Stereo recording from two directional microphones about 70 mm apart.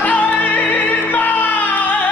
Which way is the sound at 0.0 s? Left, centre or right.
Left.